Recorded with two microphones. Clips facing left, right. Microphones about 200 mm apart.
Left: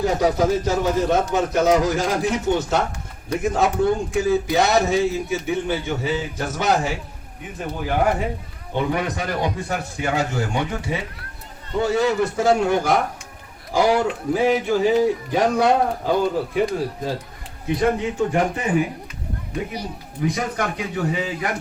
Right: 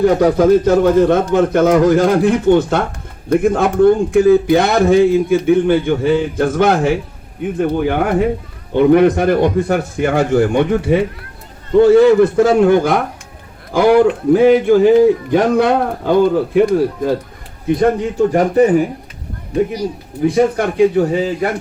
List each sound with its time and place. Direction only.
0.0 s a man's voice: 55° right (ahead or behind)
17.7 s a man's voice: 40° right (ahead or behind)
20.2 s a man's voice: 30° right (ahead or behind)